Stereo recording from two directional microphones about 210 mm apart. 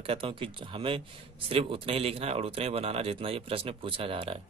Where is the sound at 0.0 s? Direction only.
25° right (ahead or behind).